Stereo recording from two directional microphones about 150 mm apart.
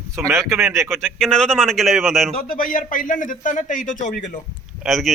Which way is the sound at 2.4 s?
70° left (ahead or behind).